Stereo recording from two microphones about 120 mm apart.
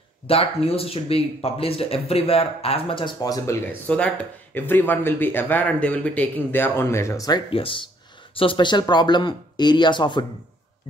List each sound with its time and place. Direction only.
0.3 s speech: 55° left (ahead or behind); by 3.5 s 30° left (ahead or behind)
3.6 s speech: 15° left (ahead or behind); by 7.4 s 30° left (ahead or behind)
7.4 s speech: 50° left (ahead or behind)